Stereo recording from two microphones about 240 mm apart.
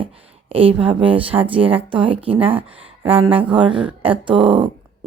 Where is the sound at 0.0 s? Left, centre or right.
Right.